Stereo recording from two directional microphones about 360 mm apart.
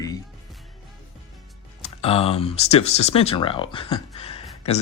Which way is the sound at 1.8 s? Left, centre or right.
Centre.